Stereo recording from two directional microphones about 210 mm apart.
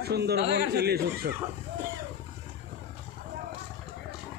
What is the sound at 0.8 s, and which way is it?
Speech, 50° right (ahead or behind).